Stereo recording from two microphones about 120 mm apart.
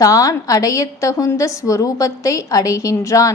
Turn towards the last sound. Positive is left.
turn(degrees=25)  # may be behind; listen again after turning